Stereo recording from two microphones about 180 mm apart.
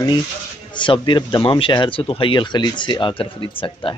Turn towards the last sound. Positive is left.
turn(degrees=30)  # may be behind; listen again after turning